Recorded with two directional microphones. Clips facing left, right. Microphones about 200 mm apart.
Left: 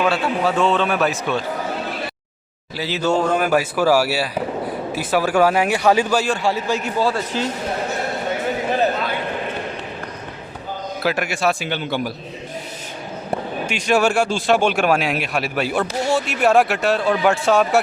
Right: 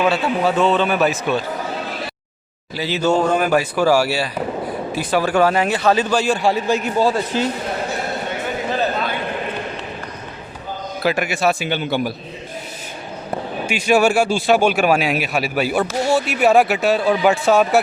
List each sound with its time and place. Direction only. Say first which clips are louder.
0.0 s speech: right 2 dB; centre (ahead or behind)
2.7 s a man's voice: right 2 dB; centre (ahead or behind)
6.2 s speech: right 3 dB; 10° right (ahead or behind)
11.0 s speech: right 2 dB; centre (ahead or behind)
13.7 s speech: right 3 dB; 5° right (ahead or behind)